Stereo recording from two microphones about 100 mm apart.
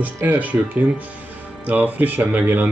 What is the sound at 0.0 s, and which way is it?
Speech, 15° right (ahead or behind).